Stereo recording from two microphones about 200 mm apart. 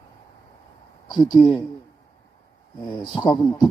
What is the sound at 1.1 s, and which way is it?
Speech, 20° left (ahead or behind).